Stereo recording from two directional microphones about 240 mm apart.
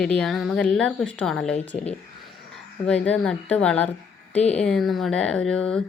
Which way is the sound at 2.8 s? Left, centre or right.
Centre.